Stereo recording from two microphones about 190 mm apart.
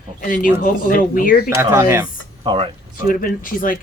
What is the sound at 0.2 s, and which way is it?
Speech, 45° left (ahead or behind).